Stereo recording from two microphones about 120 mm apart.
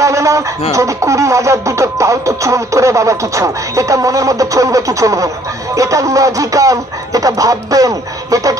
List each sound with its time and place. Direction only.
0.0 s speech: 25° right (ahead or behind)